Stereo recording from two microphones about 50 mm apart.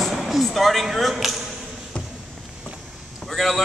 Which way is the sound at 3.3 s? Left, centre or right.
Centre.